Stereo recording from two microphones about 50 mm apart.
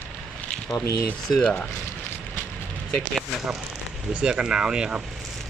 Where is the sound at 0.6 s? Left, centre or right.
Left.